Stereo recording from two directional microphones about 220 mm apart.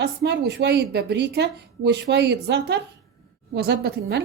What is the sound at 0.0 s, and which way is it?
A woman's voice, 50° right (ahead or behind).